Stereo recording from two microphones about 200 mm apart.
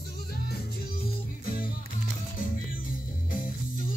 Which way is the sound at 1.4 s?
45° left (ahead or behind).